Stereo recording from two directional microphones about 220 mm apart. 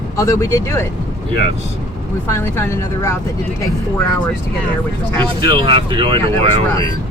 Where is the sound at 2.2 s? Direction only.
10° left (ahead or behind).